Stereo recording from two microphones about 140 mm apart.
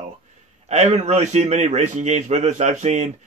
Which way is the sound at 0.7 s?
55° right (ahead or behind).